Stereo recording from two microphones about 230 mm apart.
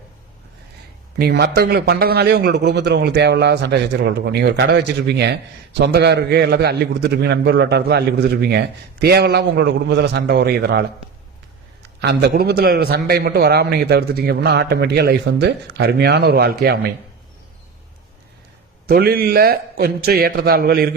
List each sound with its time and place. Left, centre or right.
1.2 s a man's voice: right
18.9 s a man's voice: right